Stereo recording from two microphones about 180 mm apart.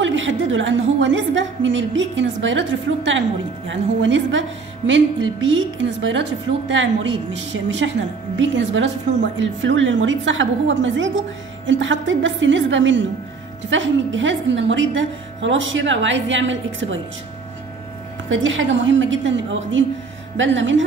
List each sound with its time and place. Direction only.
0.0 s a woman's voice: 90° right
18.3 s a woman's voice: 90° right